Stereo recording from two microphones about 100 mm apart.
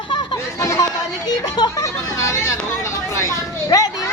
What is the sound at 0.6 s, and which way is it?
Chatter, 30° left (ahead or behind).